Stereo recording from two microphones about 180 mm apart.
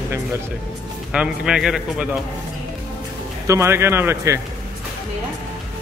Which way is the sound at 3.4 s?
15° right (ahead or behind).